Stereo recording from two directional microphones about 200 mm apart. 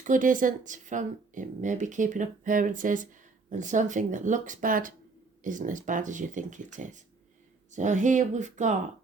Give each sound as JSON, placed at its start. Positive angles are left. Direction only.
{"t": 0.0, "sound": "speech", "side_deg": -40}